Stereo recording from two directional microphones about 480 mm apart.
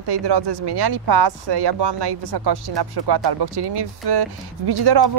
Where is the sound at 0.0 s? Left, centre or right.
Right.